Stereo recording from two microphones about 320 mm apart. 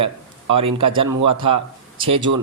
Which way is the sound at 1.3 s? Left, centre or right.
Right.